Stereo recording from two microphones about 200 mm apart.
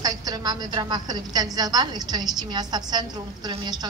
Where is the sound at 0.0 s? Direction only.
20° right (ahead or behind).